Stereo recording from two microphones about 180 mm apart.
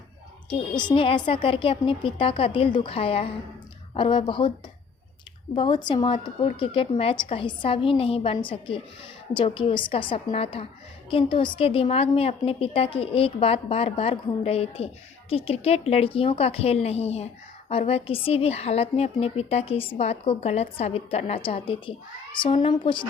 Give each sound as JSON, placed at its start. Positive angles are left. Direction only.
{"t": 0.7, "sound": "a woman's voice", "side_deg": 25}
{"t": 5.5, "sound": "a woman's voice", "side_deg": 25}